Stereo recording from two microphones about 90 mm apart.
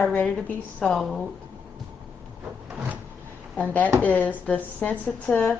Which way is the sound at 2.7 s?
20° right (ahead or behind).